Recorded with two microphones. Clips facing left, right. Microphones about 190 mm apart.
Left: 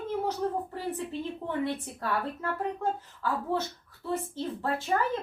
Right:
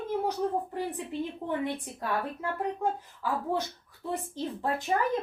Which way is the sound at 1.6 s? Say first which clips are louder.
Left 1 dB; 15° right (ahead or behind).